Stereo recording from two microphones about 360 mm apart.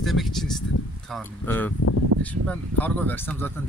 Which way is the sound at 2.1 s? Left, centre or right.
Right.